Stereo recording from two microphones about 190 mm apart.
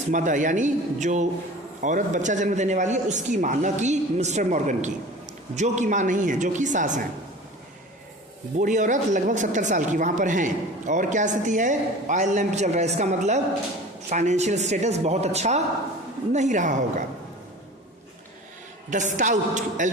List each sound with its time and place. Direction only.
0.1 s speech: 40° right (ahead or behind)
8.5 s speech: 40° right (ahead or behind)
18.9 s speech: 40° right (ahead or behind)